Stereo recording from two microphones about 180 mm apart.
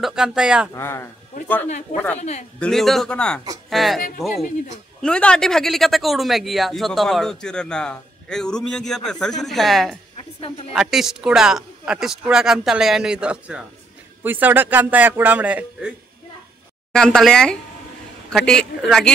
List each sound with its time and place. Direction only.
0.0 s speech: 5° right (ahead or behind)
0.7 s speech: 15° left (ahead or behind)
1.7 s speech: 40° left (ahead or behind)
2.6 s speech: centre (ahead or behind)
5.0 s a man's voice: 5° left (ahead or behind)
16.9 s speech: 5° left (ahead or behind)